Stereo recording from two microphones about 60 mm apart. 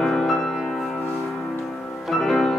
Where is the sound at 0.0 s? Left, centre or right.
Centre.